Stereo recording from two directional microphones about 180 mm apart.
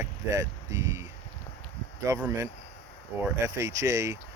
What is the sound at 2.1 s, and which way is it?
Speech, 15° right (ahead or behind).